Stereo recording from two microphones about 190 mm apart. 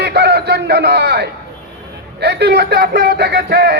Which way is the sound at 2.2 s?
60° right (ahead or behind).